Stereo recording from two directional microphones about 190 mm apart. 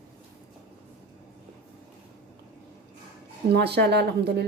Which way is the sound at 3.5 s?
60° right (ahead or behind).